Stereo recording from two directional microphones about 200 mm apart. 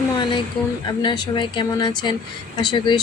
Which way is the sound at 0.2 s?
25° left (ahead or behind).